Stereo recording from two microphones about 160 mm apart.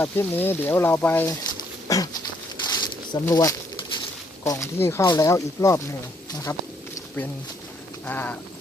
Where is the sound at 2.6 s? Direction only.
25° left (ahead or behind).